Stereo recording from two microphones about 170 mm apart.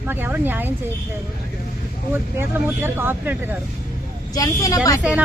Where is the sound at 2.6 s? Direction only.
10° right (ahead or behind).